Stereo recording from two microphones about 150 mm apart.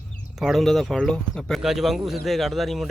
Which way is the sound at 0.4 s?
Centre (ahead or behind).